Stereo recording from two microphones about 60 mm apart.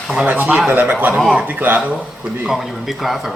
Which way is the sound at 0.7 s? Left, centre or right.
Right.